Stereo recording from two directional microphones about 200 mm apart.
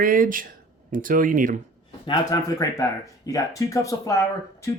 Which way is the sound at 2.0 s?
20° left (ahead or behind).